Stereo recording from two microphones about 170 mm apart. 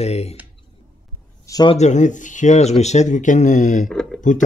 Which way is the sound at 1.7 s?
40° left (ahead or behind).